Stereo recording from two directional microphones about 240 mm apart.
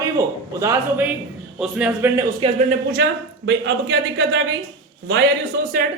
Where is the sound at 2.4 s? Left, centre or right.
Right.